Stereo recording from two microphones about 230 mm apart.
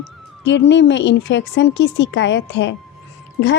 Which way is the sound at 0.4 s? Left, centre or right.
Left.